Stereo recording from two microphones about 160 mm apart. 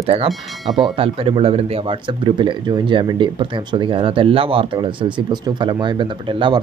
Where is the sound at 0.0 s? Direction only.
40° right (ahead or behind).